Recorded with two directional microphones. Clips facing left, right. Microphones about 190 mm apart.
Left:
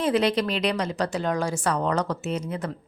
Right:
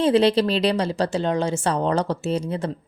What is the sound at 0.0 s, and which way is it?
A woman's voice, 30° right (ahead or behind).